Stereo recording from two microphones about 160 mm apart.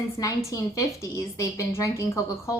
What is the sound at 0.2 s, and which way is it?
A woman's voice, 20° left (ahead or behind).